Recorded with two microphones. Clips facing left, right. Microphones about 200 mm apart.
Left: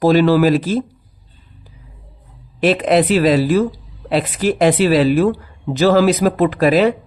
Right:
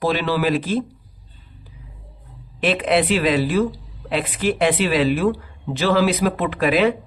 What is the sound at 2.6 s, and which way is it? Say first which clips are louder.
Speech: left 5 dB; 40° left (ahead or behind).